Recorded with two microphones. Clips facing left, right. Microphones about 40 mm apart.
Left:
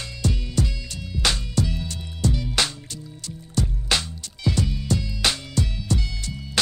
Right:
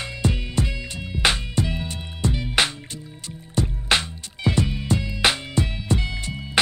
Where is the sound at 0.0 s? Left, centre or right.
Right.